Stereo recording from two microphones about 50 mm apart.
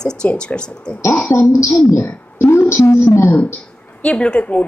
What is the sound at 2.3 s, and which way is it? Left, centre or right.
A woman's voice, left.